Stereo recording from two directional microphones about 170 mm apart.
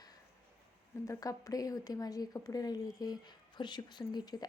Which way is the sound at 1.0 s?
20° left (ahead or behind).